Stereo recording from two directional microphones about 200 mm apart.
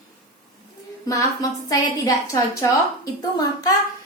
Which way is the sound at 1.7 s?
20° left (ahead or behind).